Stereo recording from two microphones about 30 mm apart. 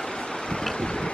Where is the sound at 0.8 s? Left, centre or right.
Left.